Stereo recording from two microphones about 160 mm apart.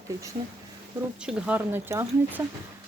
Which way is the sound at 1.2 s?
5° right (ahead or behind).